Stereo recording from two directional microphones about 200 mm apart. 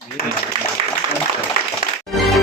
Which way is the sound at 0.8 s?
30° right (ahead or behind).